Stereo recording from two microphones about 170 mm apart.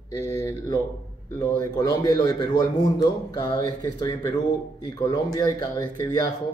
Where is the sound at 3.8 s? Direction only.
20° left (ahead or behind).